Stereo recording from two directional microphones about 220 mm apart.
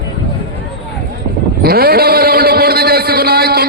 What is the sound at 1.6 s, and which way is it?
Vehicle, 45° right (ahead or behind).